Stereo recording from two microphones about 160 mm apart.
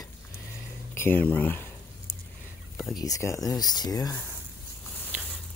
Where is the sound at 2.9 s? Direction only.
20° left (ahead or behind).